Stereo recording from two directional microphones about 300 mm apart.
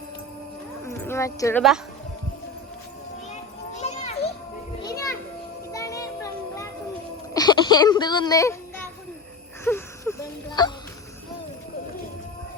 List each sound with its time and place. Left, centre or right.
0.9 s speech: centre
3.8 s children playing: left
5.7 s music: centre
7.3 s speech: centre
9.6 s a sound: centre